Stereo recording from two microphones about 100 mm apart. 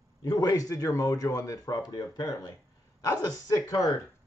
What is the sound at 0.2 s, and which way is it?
Speech, 40° left (ahead or behind).